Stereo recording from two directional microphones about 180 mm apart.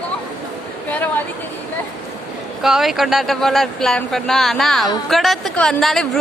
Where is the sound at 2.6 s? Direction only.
Centre (ahead or behind).